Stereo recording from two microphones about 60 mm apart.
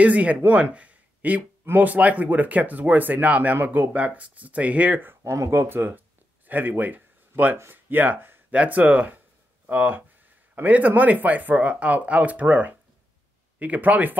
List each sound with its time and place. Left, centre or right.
0.0 s speech: right
5.2 s speech: right